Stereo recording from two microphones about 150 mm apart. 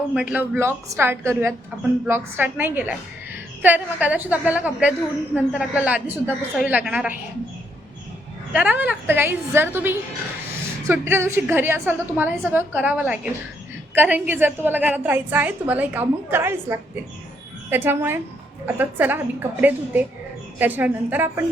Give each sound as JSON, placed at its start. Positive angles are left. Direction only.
{"t": 0.1, "sound": "a woman's voice", "side_deg": -5}
{"t": 8.5, "sound": "a woman's voice", "side_deg": -10}